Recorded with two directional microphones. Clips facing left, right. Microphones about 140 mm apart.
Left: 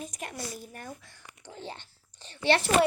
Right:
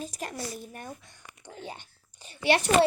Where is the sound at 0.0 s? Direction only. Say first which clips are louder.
Right 3 dB; 35° right (ahead or behind).